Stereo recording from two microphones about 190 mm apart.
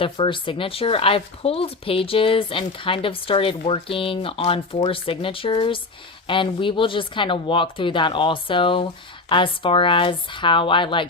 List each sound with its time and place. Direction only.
0.0 s speech: 25° left (ahead or behind)